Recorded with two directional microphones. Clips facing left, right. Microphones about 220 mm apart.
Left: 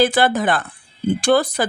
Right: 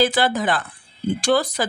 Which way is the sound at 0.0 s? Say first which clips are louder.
Left 3 dB; 55° left (ahead or behind).